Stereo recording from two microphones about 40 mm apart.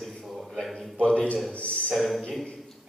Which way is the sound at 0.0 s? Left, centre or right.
Centre.